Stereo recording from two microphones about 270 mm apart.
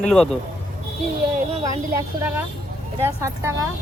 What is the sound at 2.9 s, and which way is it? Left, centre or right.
Speech, centre.